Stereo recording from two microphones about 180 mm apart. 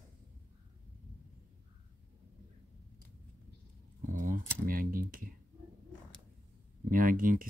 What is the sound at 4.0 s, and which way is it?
Keys jangling, 45° right (ahead or behind).